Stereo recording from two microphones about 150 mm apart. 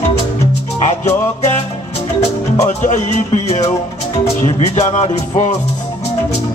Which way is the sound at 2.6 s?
55° left (ahead or behind).